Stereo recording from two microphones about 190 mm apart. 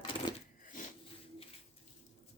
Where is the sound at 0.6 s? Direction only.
45° left (ahead or behind).